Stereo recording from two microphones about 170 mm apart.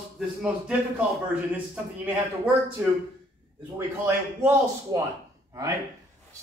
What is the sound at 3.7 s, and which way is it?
Speech, 15° right (ahead or behind).